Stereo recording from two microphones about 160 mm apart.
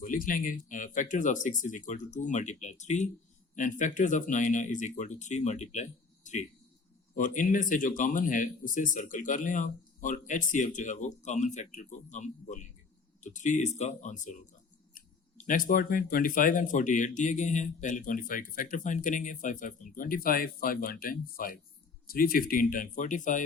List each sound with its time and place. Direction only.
0.0 s speech: 60° left (ahead or behind)